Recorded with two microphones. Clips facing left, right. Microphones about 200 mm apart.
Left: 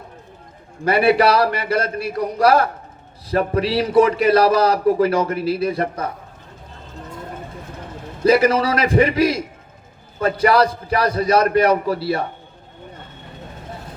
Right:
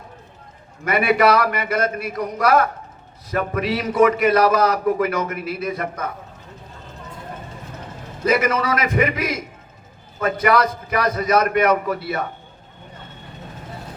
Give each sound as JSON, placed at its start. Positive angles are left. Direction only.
{"t": 0.9, "sound": "a man's voice", "side_deg": 30}
{"t": 8.2, "sound": "a man's voice", "side_deg": 30}